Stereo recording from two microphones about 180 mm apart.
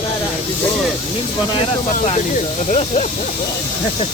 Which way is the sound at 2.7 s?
40° left (ahead or behind).